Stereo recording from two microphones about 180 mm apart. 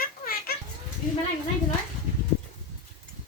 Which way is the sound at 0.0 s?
55° left (ahead or behind).